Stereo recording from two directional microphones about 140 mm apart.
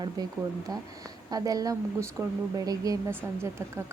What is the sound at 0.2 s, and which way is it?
A woman's voice, 30° right (ahead or behind).